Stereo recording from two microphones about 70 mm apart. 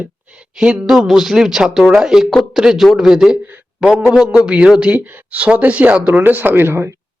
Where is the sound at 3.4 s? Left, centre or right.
Right.